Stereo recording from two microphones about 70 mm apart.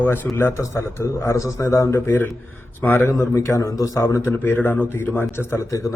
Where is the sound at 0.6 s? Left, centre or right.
Left.